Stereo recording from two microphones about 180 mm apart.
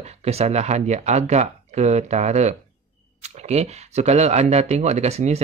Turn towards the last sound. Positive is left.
turn(degrees=-35)  # may be behind; listen again after turning